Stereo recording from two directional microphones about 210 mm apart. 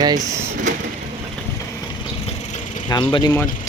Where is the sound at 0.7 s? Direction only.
35° right (ahead or behind).